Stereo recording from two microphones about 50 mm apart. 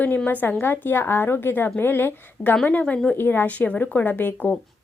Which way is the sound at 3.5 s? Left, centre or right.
Left.